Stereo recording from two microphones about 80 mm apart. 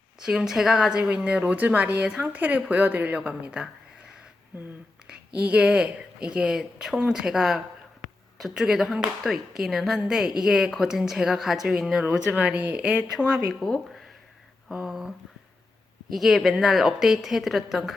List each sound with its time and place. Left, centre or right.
0.2 s a woman's voice: centre
12.0 s speech: centre
13.1 s speech: centre
16.1 s speech: centre